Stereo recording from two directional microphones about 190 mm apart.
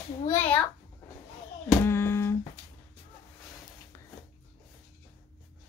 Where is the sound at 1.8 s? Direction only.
15° left (ahead or behind).